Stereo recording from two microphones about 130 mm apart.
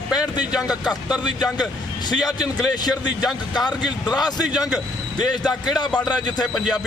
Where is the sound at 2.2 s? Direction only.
30° left (ahead or behind).